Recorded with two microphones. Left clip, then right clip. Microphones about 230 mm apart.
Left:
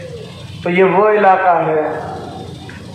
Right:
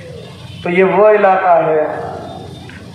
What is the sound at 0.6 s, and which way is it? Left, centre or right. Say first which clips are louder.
Speech: right 2 dB; right.